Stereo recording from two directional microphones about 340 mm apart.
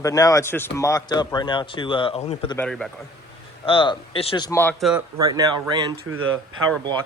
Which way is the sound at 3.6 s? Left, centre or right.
Centre.